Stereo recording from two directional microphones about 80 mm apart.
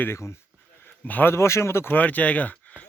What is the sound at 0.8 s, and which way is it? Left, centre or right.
Speech, left.